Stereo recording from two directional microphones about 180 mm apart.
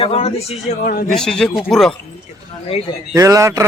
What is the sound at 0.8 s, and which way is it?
Speech, 55° left (ahead or behind).